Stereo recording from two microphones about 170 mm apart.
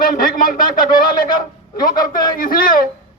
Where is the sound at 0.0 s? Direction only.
55° left (ahead or behind).